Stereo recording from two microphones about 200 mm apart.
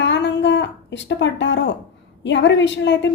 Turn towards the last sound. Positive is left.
turn(degrees=60)  # may be behind; listen again after turning